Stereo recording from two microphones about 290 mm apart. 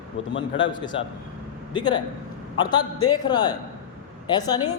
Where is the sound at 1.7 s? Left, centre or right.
Centre.